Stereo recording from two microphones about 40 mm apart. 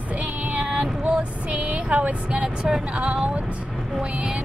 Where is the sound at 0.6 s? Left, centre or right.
Right.